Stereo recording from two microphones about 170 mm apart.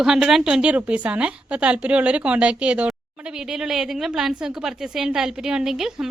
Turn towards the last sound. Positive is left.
turn(degrees=-5)  # may be behind; listen again after turning